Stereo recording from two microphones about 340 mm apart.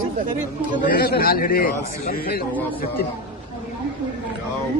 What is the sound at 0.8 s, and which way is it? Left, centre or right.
A man's voice, left.